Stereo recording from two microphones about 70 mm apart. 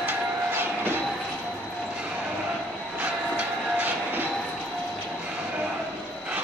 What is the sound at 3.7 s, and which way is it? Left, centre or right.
Train, right.